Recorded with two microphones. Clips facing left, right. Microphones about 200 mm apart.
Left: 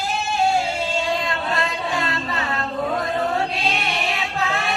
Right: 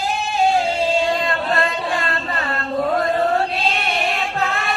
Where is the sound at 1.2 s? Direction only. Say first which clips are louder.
Right 4 dB; 55° right (ahead or behind).